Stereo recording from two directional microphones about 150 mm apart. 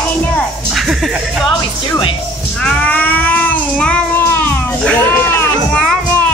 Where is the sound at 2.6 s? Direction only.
10° left (ahead or behind).